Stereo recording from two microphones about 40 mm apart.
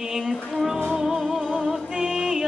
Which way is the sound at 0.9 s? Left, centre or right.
Centre.